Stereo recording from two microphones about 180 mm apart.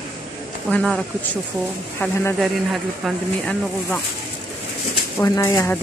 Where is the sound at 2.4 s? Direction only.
Centre (ahead or behind).